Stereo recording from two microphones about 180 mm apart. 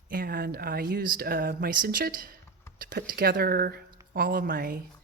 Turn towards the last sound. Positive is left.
turn(degrees=-55)  # may be behind; listen again after turning